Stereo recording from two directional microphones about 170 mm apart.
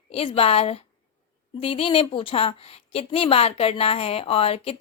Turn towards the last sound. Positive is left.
turn(degrees=35)  # may be behind; listen again after turning